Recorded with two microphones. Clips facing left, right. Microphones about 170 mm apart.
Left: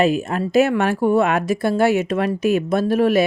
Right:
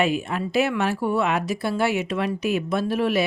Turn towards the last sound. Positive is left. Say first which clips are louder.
# left 6 dB
turn(degrees=45)  # may be behind; listen again after turning